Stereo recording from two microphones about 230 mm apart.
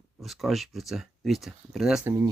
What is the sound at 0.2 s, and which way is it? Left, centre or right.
Speech, centre.